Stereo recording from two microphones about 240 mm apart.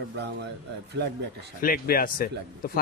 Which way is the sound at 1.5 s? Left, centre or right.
Left.